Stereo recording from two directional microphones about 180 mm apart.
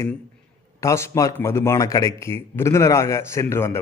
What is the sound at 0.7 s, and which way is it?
A man's voice, 15° left (ahead or behind).